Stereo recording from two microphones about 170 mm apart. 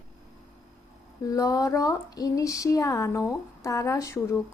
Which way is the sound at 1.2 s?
20° left (ahead or behind).